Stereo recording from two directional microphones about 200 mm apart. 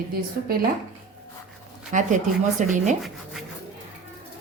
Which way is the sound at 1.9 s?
40° right (ahead or behind).